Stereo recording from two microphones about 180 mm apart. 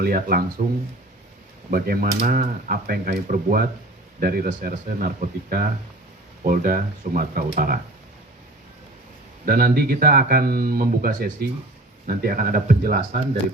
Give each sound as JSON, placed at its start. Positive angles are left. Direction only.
{"t": 0.0, "sound": "speech", "side_deg": -55}
{"t": 1.7, "sound": "speech", "side_deg": -55}
{"t": 9.5, "sound": "speech", "side_deg": -55}